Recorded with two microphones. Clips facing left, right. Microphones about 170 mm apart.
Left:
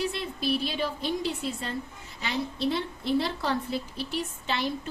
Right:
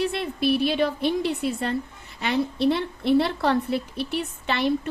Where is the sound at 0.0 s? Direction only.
60° right (ahead or behind).